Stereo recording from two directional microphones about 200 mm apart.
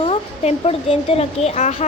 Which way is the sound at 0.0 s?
30° left (ahead or behind).